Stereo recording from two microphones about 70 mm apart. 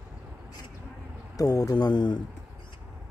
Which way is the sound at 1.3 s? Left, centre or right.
Left.